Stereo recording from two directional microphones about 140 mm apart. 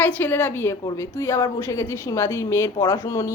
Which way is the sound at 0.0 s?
15° left (ahead or behind).